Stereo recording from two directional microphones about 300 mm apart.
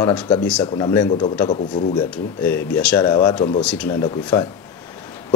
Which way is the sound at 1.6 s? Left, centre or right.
Left.